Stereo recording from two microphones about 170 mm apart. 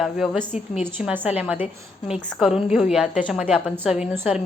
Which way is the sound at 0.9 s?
10° right (ahead or behind).